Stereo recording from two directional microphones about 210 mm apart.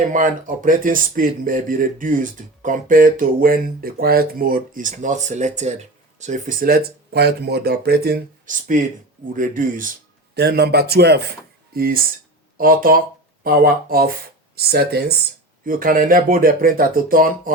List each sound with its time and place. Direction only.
0.1 s speech: 40° right (ahead or behind)
10.3 s speech: 50° right (ahead or behind)